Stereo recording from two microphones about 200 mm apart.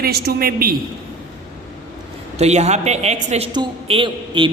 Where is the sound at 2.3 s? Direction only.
35° right (ahead or behind).